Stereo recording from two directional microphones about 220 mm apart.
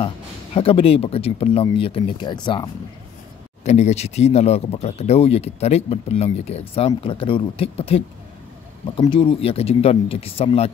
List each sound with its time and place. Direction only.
0.6 s speech: 25° left (ahead or behind)
3.6 s speech: 30° left (ahead or behind)